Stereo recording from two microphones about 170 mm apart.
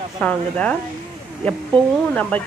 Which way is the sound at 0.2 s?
10° left (ahead or behind).